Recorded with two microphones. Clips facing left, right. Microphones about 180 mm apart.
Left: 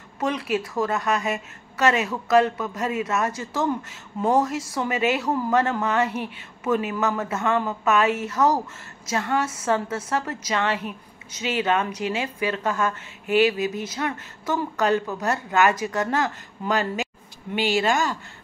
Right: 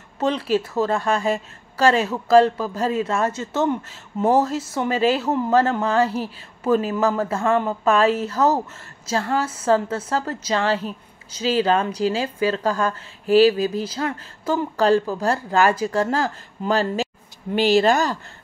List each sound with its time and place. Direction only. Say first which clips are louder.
0.2 s a woman's voice: right 4 dB; 30° right (ahead or behind)